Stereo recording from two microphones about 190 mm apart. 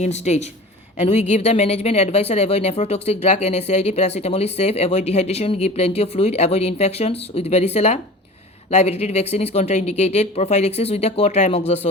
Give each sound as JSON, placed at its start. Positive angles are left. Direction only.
{"t": 0.0, "sound": "speech", "side_deg": 35}